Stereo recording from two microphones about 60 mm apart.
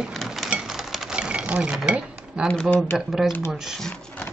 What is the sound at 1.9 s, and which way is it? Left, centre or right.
Dishes, centre.